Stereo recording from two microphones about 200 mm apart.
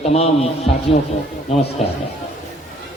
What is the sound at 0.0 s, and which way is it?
Speech, 30° left (ahead or behind).